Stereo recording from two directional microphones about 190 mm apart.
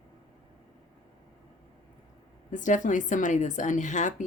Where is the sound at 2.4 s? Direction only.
40° left (ahead or behind).